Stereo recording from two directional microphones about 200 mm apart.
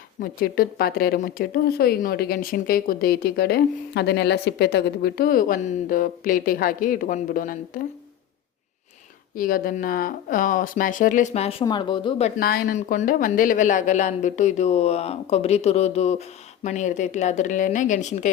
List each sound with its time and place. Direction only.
0.2 s a woman's voice: 45° left (ahead or behind)
9.3 s speech: 45° left (ahead or behind); by 12.3 s 25° left (ahead or behind)
12.4 s speech: 50° left (ahead or behind)